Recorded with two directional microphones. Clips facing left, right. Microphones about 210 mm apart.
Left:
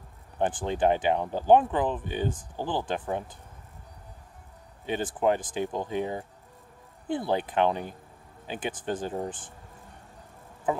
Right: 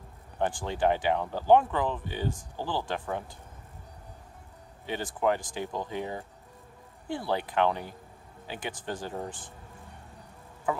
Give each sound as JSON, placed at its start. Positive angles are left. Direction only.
{"t": 0.4, "sound": "speech", "side_deg": 20}
{"t": 4.8, "sound": "speech", "side_deg": 20}